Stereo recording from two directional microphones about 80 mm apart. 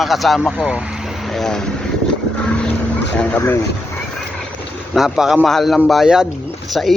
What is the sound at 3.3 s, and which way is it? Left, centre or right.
Speech, left.